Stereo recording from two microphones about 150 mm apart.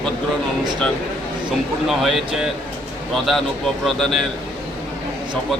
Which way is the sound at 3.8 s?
5° left (ahead or behind).